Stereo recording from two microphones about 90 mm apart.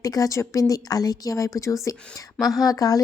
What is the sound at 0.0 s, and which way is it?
Speech, 40° left (ahead or behind).